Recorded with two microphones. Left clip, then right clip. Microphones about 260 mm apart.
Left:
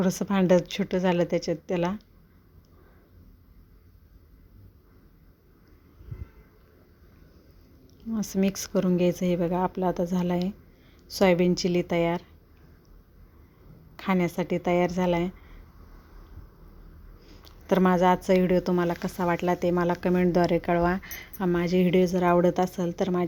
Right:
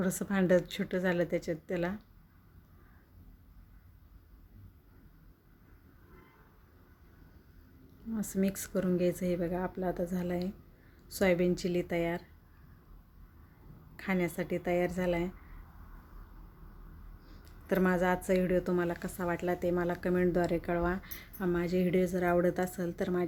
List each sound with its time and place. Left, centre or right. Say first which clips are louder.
0.0 s a woman's voice: left 6 dB; centre
8.1 s speech: left 6 dB; centre
13.9 s speech: left 6 dB; left
17.4 s speech: left 7 dB; centre